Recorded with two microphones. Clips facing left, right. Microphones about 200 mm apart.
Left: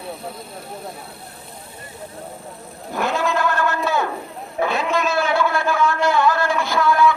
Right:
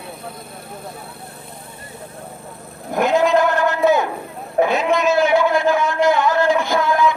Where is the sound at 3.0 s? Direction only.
15° right (ahead or behind).